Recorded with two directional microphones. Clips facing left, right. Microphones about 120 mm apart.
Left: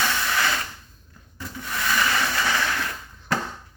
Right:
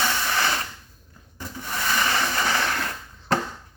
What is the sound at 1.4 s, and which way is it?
Rub, 30° right (ahead or behind).